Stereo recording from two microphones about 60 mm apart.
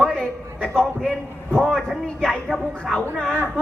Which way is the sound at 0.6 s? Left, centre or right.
Centre.